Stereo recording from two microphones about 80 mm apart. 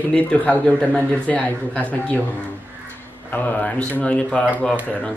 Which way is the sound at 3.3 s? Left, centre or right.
Centre.